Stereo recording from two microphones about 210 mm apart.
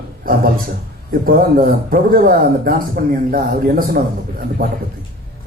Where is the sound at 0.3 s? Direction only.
45° right (ahead or behind).